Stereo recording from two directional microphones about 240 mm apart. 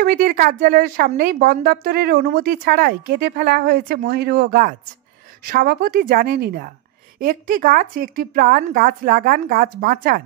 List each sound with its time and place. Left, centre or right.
0.0 s a woman's voice: right